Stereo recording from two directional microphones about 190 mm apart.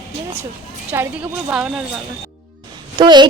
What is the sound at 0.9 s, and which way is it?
A woman's voice, 10° right (ahead or behind).